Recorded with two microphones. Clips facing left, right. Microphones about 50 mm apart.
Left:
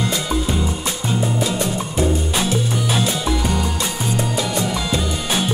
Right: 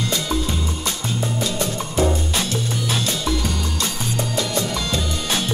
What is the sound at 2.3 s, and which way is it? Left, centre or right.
Music, centre.